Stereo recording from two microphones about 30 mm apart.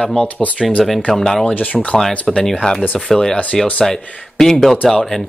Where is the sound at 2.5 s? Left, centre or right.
Left.